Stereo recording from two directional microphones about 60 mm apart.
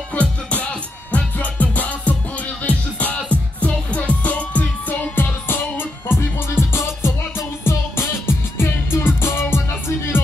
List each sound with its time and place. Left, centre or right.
0.1 s music: left